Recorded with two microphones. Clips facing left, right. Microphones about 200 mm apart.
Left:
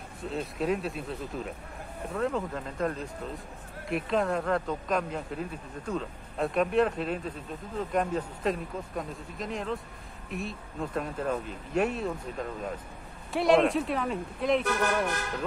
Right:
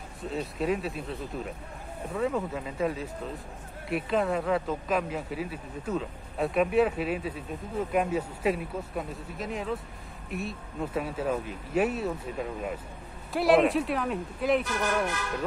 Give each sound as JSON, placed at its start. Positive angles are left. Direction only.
{"t": 0.2, "sound": "speech", "side_deg": 0}